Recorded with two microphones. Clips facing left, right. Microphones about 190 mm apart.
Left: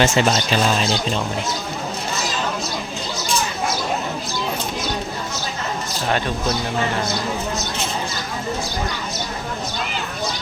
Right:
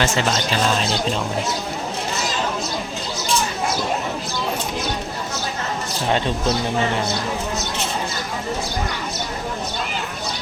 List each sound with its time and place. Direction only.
0.0 s speech: 20° left (ahead or behind)
6.1 s speech: 25° right (ahead or behind)